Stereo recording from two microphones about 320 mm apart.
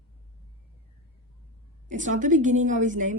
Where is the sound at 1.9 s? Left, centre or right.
Right.